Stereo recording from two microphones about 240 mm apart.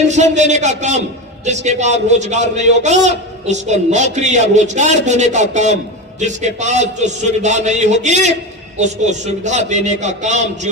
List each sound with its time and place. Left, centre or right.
0.1 s a man's voice: right